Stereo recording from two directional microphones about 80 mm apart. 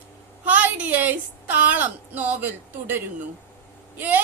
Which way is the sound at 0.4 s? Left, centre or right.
Centre.